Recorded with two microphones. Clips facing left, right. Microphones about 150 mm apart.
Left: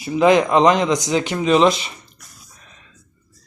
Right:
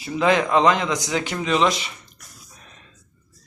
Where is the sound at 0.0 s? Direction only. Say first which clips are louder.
Left 5 dB; 15° left (ahead or behind).